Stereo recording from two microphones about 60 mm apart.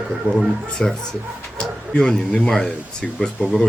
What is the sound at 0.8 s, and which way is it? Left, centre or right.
Speech, centre.